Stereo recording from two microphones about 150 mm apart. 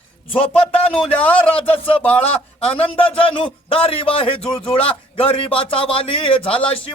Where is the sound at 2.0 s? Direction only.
10° left (ahead or behind).